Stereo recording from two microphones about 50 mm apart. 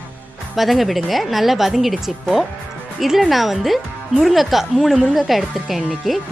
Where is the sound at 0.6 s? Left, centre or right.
Centre.